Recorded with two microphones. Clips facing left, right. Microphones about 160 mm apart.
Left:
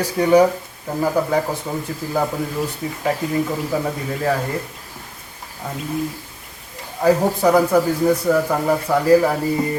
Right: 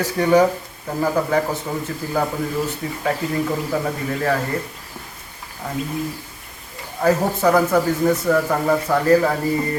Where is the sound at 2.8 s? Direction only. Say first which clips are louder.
Left 1 dB; 15° left (ahead or behind).